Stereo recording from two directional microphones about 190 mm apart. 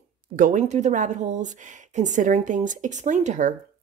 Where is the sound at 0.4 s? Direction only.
40° right (ahead or behind).